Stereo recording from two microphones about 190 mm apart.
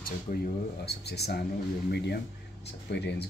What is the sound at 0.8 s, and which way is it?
Speech, 60° left (ahead or behind).